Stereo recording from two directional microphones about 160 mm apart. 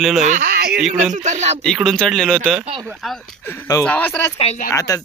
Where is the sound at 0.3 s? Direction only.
60° right (ahead or behind).